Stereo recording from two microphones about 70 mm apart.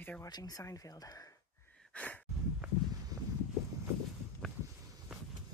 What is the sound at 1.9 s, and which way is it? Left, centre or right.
Speech, left.